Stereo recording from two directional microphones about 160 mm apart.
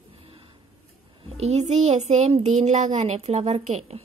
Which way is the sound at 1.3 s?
40° right (ahead or behind).